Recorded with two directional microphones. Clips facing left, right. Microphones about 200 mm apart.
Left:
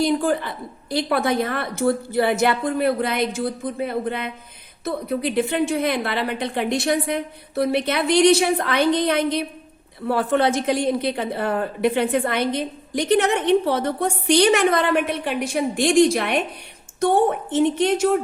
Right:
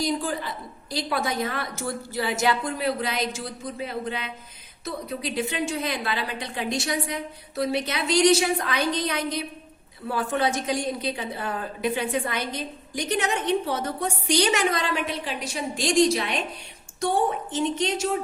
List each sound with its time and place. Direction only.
0.0 s a woman's voice: 60° left (ahead or behind)